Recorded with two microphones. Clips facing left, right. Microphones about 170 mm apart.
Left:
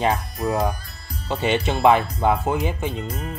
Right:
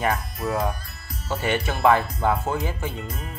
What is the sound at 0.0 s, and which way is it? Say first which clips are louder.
Speech: left 3 dB; 20° left (ahead or behind).